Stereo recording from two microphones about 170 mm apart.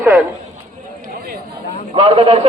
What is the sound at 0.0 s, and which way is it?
Speech, 5° right (ahead or behind).